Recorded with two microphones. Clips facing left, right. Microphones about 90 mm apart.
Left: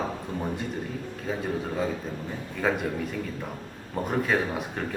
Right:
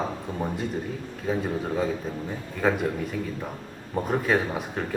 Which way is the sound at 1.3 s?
Centre (ahead or behind).